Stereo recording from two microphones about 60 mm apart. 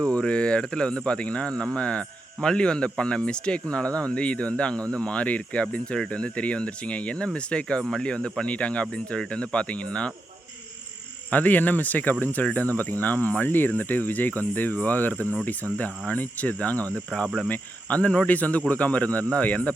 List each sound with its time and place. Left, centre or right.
0.0 s speech: centre
11.3 s speech: left